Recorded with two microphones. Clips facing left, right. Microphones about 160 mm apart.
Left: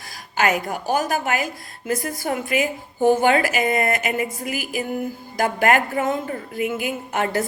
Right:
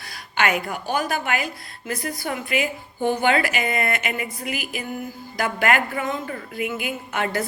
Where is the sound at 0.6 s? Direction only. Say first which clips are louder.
Left 3 dB; 40° left (ahead or behind).